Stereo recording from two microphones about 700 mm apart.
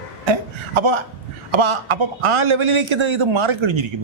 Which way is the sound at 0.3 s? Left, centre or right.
Right.